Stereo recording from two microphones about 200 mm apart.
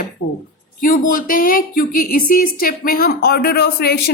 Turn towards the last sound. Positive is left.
turn(degrees=50)  # may be behind; listen again after turning